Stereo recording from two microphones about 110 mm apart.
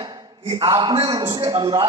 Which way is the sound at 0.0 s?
40° right (ahead or behind).